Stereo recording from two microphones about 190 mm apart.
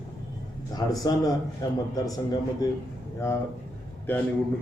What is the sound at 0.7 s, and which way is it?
A man's voice, 20° left (ahead or behind).